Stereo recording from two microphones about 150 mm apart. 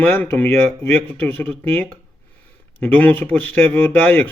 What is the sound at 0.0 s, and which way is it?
Speech, 10° left (ahead or behind).